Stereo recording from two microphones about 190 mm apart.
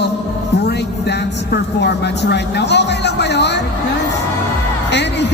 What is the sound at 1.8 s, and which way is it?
Speech, 65° left (ahead or behind).